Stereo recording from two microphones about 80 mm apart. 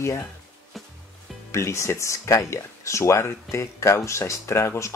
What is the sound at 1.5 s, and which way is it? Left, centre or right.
Speech, left.